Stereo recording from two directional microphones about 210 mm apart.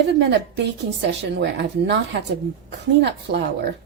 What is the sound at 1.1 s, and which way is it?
Speech, 55° right (ahead or behind).